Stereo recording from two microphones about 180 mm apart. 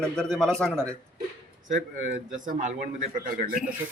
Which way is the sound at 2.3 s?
45° right (ahead or behind).